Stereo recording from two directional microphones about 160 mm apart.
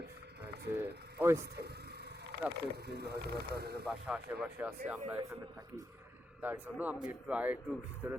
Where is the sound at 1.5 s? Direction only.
90° right.